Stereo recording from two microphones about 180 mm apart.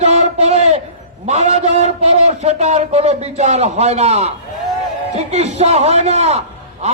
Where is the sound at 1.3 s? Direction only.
40° right (ahead or behind).